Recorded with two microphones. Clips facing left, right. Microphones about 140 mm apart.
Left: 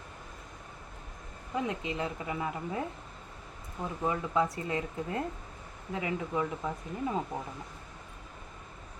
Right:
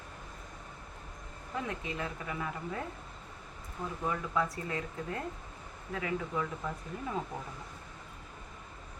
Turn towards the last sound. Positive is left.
turn(degrees=20)  # may be behind; listen again after turning